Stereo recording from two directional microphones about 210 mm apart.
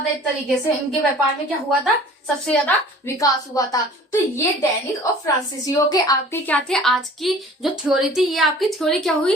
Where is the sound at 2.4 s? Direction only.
5° left (ahead or behind).